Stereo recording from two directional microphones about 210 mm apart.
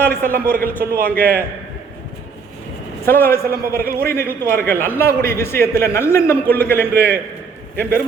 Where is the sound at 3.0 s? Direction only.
10° left (ahead or behind).